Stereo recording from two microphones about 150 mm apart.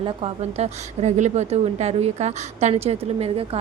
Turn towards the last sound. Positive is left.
turn(degrees=-40)  # may be behind; listen again after turning